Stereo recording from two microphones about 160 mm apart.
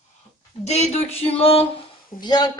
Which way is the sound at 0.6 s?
40° left (ahead or behind).